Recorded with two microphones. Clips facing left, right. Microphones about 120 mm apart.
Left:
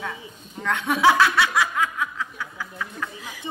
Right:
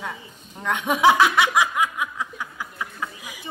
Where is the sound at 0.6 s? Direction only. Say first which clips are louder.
Right 1 dB; 15° right (ahead or behind).